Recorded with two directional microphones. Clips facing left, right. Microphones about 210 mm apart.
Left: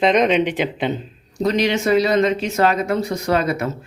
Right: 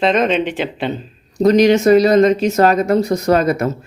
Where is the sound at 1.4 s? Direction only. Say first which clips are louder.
Right 8 dB; 45° right (ahead or behind).